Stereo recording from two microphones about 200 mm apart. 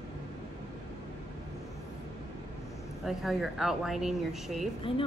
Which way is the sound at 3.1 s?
Centre (ahead or behind).